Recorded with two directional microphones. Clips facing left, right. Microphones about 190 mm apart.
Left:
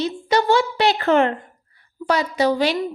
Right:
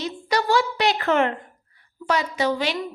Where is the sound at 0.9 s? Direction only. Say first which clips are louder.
Left 4 dB; 35° left (ahead or behind).